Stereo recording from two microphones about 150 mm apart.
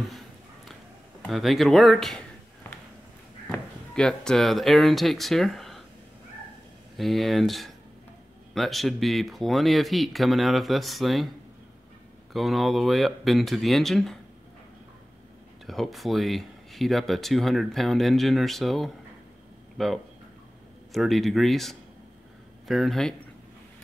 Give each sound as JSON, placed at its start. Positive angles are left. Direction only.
{"t": 1.2, "sound": "speech", "side_deg": 0}
{"t": 3.5, "sound": "speech", "side_deg": 5}
{"t": 7.0, "sound": "speech", "side_deg": 0}
{"t": 12.3, "sound": "speech", "side_deg": 0}
{"t": 15.6, "sound": "speech", "side_deg": 0}